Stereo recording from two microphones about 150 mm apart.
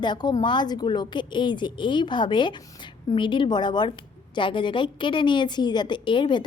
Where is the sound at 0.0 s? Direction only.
30° left (ahead or behind).